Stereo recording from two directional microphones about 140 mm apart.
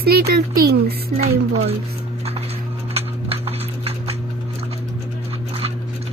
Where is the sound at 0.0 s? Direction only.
90° right.